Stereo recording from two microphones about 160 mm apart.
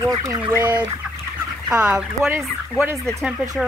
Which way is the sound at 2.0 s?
10° right (ahead or behind).